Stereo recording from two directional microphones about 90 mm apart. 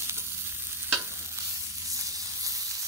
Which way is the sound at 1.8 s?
40° right (ahead or behind).